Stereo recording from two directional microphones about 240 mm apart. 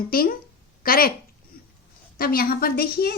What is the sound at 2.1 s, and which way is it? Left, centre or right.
Speech, left.